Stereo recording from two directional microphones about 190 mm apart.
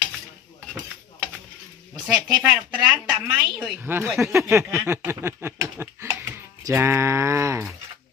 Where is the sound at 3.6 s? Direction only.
10° right (ahead or behind).